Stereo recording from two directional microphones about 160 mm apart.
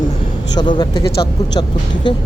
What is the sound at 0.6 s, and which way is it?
Speech, 25° left (ahead or behind).